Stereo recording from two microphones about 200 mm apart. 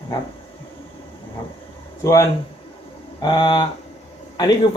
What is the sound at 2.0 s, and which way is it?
Speech, 15° left (ahead or behind).